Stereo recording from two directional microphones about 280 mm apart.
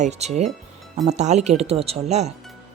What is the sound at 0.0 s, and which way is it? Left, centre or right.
Speech, right.